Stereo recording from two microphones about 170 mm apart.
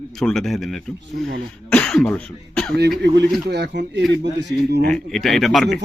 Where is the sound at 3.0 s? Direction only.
80° right.